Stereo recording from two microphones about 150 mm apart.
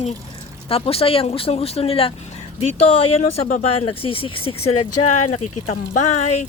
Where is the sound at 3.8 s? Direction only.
35° left (ahead or behind).